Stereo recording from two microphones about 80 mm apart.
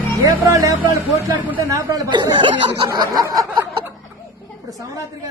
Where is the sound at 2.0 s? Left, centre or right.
Right.